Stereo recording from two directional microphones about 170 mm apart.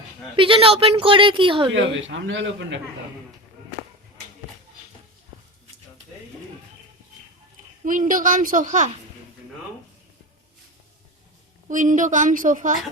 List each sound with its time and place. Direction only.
0.3 s a woman's voice: 30° right (ahead or behind)
1.7 s speech: 90° right
7.9 s a woman's voice: 50° right (ahead or behind)
11.7 s a woman's voice: 50° right (ahead or behind)